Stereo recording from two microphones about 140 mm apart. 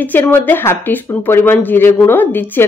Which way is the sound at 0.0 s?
15° left (ahead or behind).